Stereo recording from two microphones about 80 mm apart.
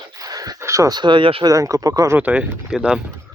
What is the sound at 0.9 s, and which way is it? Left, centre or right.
Speech, right.